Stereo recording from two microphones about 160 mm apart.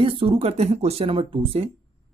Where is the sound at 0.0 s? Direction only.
35° right (ahead or behind).